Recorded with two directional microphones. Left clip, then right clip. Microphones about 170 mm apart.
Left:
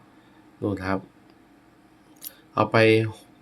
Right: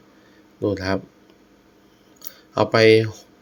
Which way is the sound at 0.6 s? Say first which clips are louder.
Right 5 dB; 15° right (ahead or behind).